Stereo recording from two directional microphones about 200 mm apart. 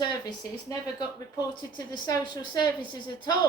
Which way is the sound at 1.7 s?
20° left (ahead or behind).